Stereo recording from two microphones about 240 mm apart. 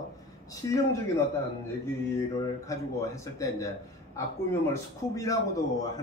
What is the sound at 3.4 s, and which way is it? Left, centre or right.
A man's voice, centre.